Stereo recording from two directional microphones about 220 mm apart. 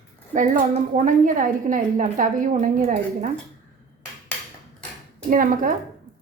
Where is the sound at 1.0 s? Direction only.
35° right (ahead or behind).